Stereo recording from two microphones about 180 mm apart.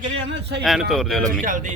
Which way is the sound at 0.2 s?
80° right.